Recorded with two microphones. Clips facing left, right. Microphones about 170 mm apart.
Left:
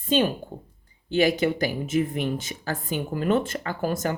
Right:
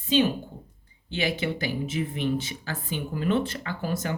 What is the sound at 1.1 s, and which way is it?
Speech, 45° left (ahead or behind).